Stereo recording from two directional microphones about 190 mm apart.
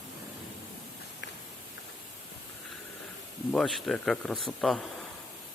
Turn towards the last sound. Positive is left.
turn(degrees=0)  # may be behind; listen again after turning